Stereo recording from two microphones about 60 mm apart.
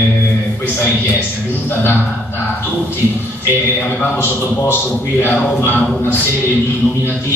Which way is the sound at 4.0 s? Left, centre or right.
Left.